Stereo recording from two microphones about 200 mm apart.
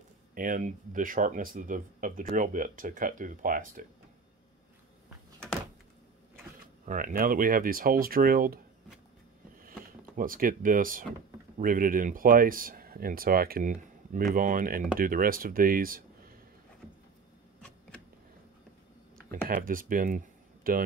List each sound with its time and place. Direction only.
0.3 s speech: 45° right (ahead or behind)
6.9 s speech: 45° right (ahead or behind)
9.6 s power windows: 45° right (ahead or behind)
11.5 s speech: 40° right (ahead or behind)
17.6 s a sound: 5° left (ahead or behind)
19.4 s speech: 45° right (ahead or behind)